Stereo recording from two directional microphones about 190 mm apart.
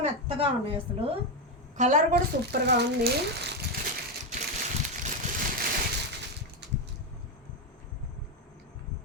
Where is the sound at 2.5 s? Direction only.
60° right (ahead or behind).